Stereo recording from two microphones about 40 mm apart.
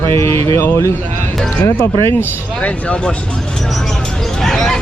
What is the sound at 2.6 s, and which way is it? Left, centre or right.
Speech, left.